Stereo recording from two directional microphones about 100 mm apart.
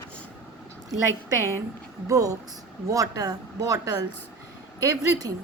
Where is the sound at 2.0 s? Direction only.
35° right (ahead or behind).